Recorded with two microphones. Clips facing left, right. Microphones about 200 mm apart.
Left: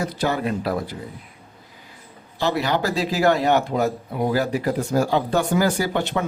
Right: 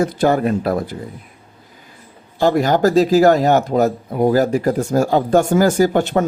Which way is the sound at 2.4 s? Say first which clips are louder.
Right 8 dB; 45° right (ahead or behind).